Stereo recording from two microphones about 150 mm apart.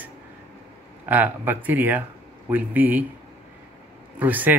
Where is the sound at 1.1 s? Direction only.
10° right (ahead or behind).